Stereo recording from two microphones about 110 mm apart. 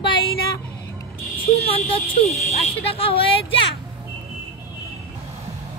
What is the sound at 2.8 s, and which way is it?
Speech, 60° left (ahead or behind).